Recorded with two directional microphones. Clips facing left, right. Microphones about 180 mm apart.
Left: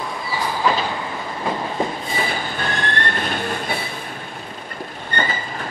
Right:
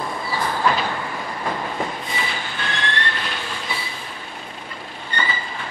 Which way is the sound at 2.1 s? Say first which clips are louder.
Left 4 dB; 45° left (ahead or behind).